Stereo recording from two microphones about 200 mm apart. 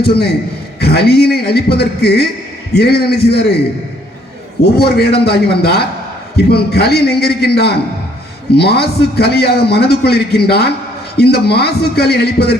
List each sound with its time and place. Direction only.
0.0 s a man's voice: 50° left (ahead or behind)
4.6 s a man's voice: 50° left (ahead or behind)